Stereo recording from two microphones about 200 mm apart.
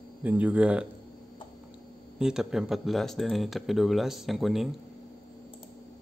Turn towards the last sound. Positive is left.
turn(degrees=0)  # may be behind; listen again after turning